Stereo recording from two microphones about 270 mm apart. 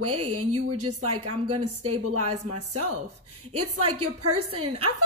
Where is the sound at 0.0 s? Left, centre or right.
Right.